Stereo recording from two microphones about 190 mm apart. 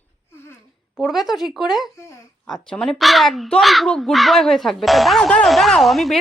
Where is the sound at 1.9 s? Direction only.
15° left (ahead or behind).